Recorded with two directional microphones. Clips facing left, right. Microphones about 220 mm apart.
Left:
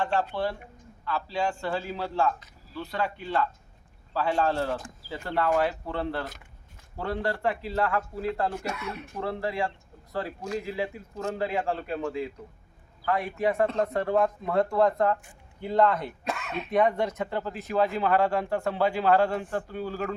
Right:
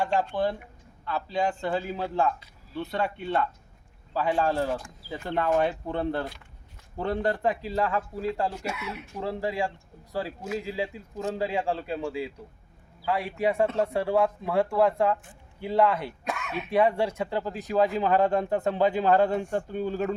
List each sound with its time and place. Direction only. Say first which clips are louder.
0.0 s a man's voice: right 2 dB; 15° right (ahead or behind)